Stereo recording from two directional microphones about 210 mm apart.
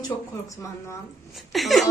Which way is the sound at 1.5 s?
Centre (ahead or behind).